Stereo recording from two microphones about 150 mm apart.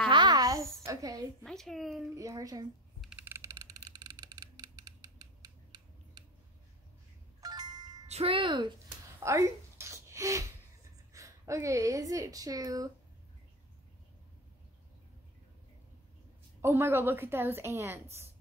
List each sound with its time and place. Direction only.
0.1 s a sound: 30° right (ahead or behind)
1.4 s speech: 5° left (ahead or behind)
2.1 s speech: 20° right (ahead or behind)
3.0 s a sound: 10° right (ahead or behind); by 6.2 s 25° right (ahead or behind)
7.4 s music: 25° right (ahead or behind)
8.1 s speech: 40° right (ahead or behind)
9.2 s music: 20° right (ahead or behind)
11.1 s speech: 20° right (ahead or behind)
16.6 s a woman's voice: 15° right (ahead or behind)